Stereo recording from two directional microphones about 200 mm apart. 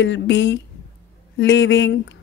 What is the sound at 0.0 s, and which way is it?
A woman's voice, 65° left (ahead or behind).